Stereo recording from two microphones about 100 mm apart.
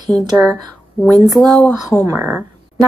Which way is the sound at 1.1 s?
40° right (ahead or behind).